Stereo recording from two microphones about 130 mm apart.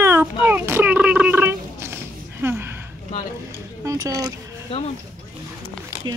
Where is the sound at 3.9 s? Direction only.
25° right (ahead or behind).